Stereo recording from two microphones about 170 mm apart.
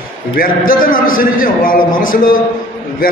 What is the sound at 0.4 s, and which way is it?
A man's voice, 55° left (ahead or behind).